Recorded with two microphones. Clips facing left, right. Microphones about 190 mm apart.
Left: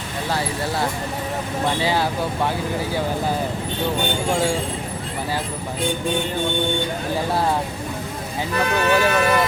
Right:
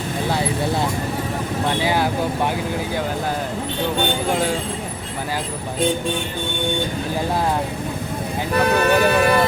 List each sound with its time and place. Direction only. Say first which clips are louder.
1.9 s speech: right 2 dB; 15° right (ahead or behind)
8.6 s speech: right 2 dB; 35° right (ahead or behind)